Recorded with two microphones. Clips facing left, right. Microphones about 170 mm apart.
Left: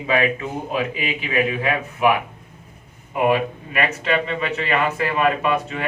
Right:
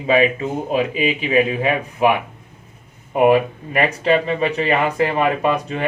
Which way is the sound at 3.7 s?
30° right (ahead or behind).